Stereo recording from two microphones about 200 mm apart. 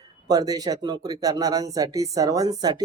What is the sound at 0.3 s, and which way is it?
Speech, 20° right (ahead or behind).